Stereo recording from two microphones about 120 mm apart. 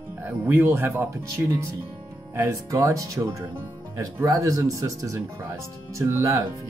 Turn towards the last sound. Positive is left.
turn(degrees=-20)  # may be behind; listen again after turning